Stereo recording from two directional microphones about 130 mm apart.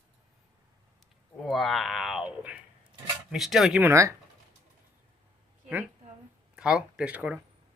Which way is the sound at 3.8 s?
20° right (ahead or behind).